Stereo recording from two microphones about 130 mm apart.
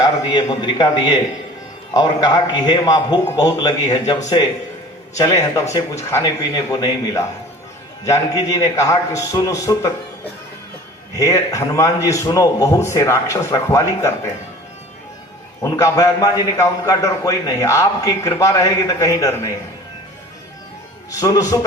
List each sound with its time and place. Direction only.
0.0 s a man's voice: 30° left (ahead or behind)
11.2 s a man's voice: 25° left (ahead or behind)
15.6 s a man's voice: 25° left (ahead or behind)
21.1 s a man's voice: 25° left (ahead or behind)